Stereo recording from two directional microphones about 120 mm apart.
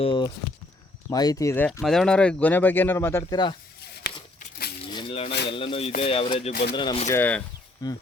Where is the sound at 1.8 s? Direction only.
5° left (ahead or behind); by 3.2 s 20° left (ahead or behind).